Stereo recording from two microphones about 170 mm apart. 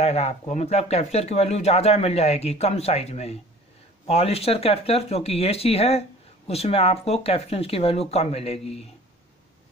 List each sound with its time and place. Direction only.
0.0 s speech: 40° left (ahead or behind)